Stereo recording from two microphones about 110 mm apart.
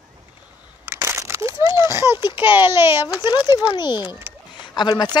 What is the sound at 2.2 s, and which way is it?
A child's voice, 45° left (ahead or behind).